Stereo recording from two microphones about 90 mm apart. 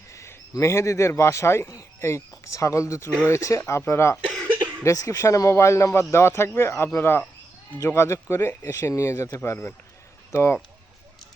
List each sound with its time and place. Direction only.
0.1 s speech: 35° left (ahead or behind)